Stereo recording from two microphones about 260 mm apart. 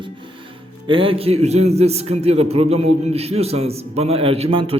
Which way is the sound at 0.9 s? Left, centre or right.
Centre.